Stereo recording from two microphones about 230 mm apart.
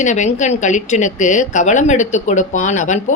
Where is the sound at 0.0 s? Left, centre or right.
Left.